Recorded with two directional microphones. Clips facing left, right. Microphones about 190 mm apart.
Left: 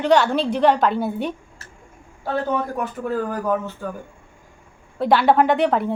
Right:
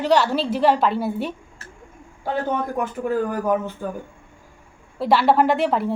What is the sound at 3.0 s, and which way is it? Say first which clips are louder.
Speech: right 1 dB; 15° right (ahead or behind).